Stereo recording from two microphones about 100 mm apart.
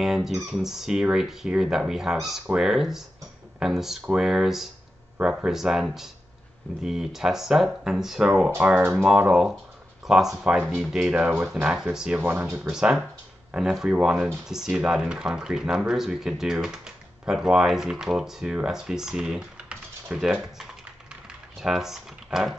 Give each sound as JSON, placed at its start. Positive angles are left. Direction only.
{"t": 0.0, "sound": "speech", "side_deg": -5}
{"t": 8.5, "sound": "speech", "side_deg": -15}
{"t": 12.2, "sound": "speech", "side_deg": -15}
{"t": 21.1, "sound": "typing", "side_deg": -5}